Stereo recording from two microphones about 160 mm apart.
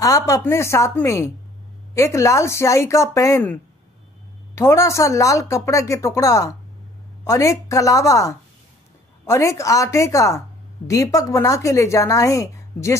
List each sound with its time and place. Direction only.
0.0 s a woman's voice: 20° left (ahead or behind)